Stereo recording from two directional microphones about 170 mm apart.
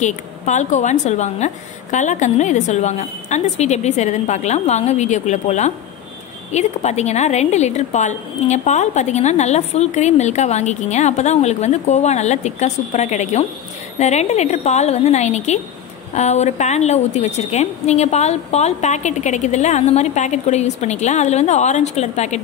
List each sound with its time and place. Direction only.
0.0 s a woman's voice: 45° left (ahead or behind)